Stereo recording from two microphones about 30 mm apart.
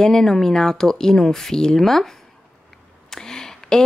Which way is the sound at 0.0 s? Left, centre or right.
Centre.